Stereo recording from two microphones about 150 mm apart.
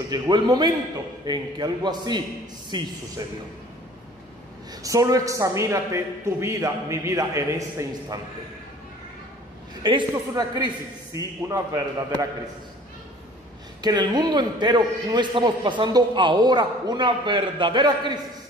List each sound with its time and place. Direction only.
0.1 s a man's voice: 30° right (ahead or behind)
4.8 s a man's voice: 25° right (ahead or behind)
9.8 s a man's voice: 30° right (ahead or behind)
13.7 s a man's voice: 30° right (ahead or behind)